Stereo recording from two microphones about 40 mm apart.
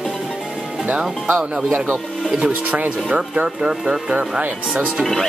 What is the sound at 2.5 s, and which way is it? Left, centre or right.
Speech, right.